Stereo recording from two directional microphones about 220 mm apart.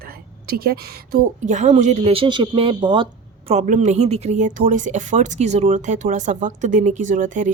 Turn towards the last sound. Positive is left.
turn(degrees=-35)  # may be behind; listen again after turning